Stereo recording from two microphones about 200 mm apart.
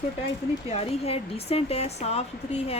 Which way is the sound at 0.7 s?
30° left (ahead or behind).